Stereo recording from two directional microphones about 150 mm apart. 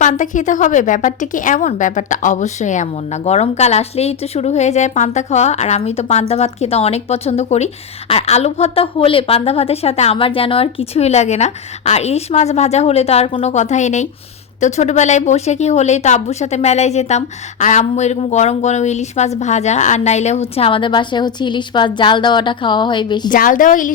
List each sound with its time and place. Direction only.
0.0 s a woman's voice: 55° left (ahead or behind); by 23.3 s 30° left (ahead or behind)
23.3 s a woman's voice: 60° left (ahead or behind)